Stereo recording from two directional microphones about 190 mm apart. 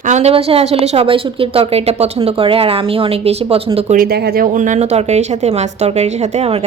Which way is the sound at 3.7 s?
40° right (ahead or behind).